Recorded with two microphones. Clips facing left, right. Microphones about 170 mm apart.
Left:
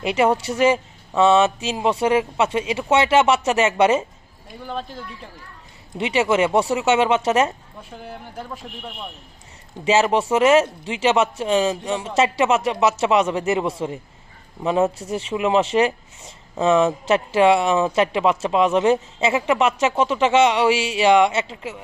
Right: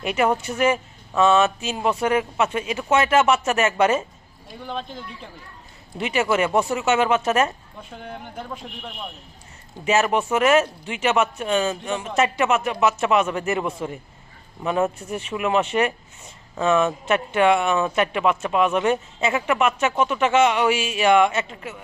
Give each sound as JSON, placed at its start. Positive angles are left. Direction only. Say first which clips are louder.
{"t": 0.6, "sound": "speech", "louder": "left 4 dB", "side_deg": 25}
{"t": 4.6, "sound": "speech", "louder": "left 1 dB", "side_deg": 5}
{"t": 5.9, "sound": "speech", "louder": "left 2 dB", "side_deg": 25}
{"t": 7.8, "sound": "speech", "louder": "right 2 dB", "side_deg": 5}
{"t": 9.8, "sound": "speech", "louder": "left 2 dB", "side_deg": 25}